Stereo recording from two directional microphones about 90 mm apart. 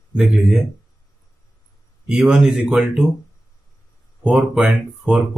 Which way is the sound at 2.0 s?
5° right (ahead or behind).